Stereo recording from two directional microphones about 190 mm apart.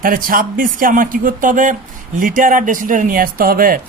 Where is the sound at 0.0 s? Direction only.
45° right (ahead or behind).